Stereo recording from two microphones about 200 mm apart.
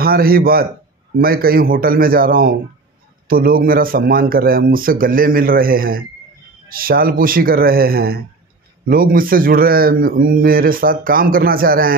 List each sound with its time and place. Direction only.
0.0 s a man's voice: 50° right (ahead or behind)